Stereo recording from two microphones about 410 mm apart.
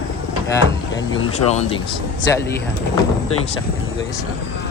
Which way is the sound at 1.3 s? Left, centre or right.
Centre.